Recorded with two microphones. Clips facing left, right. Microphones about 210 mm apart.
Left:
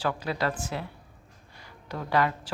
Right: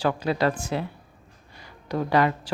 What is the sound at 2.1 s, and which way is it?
Speech, 20° right (ahead or behind).